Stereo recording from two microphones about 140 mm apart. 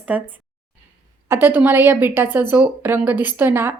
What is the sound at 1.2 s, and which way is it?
Speech, 15° right (ahead or behind).